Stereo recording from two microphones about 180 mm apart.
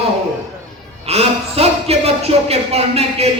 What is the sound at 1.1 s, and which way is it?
A man's voice, 35° right (ahead or behind).